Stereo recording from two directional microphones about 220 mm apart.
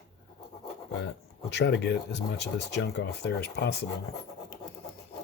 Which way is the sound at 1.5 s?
50° left (ahead or behind).